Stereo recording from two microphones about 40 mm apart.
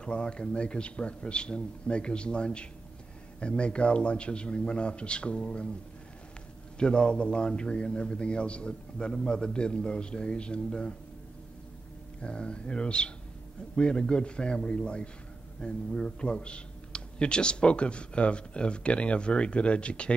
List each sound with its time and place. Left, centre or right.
0.0 s speech: left
6.8 s speech: left
12.2 s speech: left